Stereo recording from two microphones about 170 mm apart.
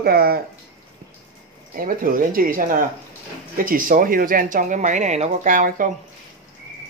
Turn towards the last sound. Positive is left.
turn(degrees=-50)  # may be behind; listen again after turning